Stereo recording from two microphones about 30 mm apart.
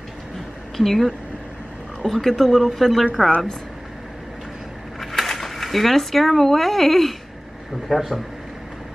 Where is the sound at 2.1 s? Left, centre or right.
Centre.